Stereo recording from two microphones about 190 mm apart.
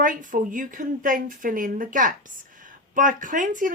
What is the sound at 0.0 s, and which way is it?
Speech, 45° right (ahead or behind).